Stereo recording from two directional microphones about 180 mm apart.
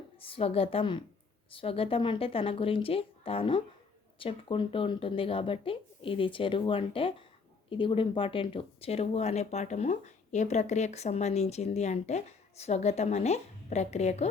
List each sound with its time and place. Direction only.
0.2 s speech: 30° left (ahead or behind)